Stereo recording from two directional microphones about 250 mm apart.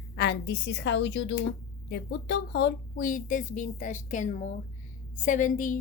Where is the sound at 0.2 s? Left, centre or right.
Left.